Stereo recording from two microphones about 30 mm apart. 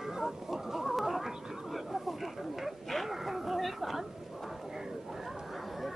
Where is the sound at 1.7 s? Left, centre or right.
Centre.